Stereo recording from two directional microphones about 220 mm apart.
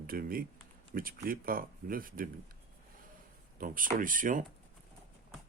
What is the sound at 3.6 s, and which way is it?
Speech, 40° right (ahead or behind).